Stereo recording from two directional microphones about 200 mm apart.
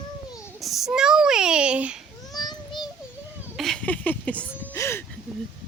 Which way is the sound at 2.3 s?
20° left (ahead or behind).